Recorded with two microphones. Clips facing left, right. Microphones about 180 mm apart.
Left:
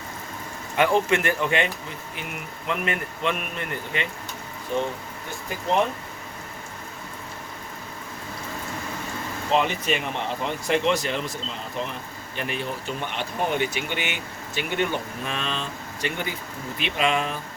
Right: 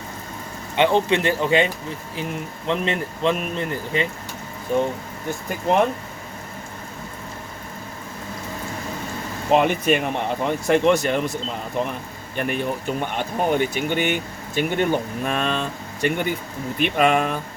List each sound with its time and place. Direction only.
0.8 s speech: 25° right (ahead or behind)
4.7 s speech: 45° right (ahead or behind)
9.5 s speech: 50° right (ahead or behind)